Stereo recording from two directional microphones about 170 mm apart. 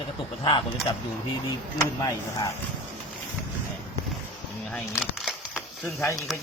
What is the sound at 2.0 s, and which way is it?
Speech, 20° left (ahead or behind).